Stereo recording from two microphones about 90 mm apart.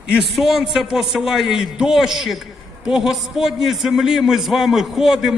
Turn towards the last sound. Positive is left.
turn(degrees=-5)  # may be behind; listen again after turning